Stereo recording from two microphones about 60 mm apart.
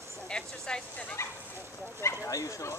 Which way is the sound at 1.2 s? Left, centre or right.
Left.